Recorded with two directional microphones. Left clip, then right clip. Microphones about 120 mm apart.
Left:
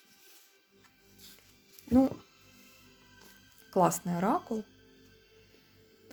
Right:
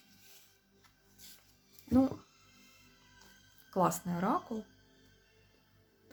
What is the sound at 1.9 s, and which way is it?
Speech, 35° left (ahead or behind).